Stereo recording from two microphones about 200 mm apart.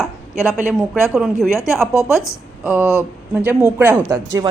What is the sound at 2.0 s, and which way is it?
Speech, 15° left (ahead or behind).